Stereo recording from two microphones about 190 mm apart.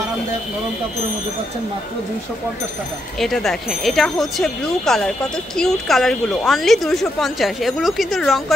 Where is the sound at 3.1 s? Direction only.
Centre (ahead or behind).